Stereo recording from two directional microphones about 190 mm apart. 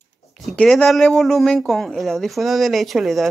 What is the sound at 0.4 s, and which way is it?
Speech, centre (ahead or behind).